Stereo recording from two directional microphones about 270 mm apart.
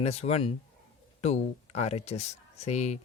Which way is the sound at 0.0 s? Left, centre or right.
Left.